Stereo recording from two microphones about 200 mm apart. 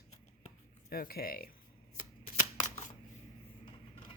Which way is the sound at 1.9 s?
40° left (ahead or behind).